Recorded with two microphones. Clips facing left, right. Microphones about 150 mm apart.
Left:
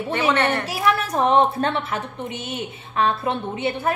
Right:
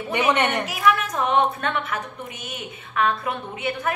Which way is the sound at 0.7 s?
35° left (ahead or behind).